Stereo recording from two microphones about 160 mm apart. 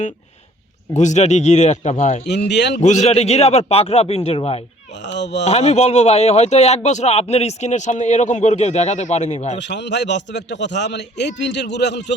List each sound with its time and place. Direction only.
0.9 s speech: 45° left (ahead or behind)
2.5 s a man's voice: 90° left
2.8 s a man's voice: 45° left (ahead or behind)
5.1 s a man's voice: 90° left
5.5 s speech: 45° left (ahead or behind)
9.6 s a man's voice: 90° left